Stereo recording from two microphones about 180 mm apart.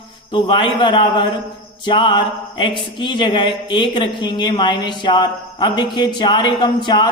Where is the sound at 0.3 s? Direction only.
25° left (ahead or behind).